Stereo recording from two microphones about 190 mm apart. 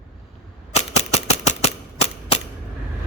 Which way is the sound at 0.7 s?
35° left (ahead or behind).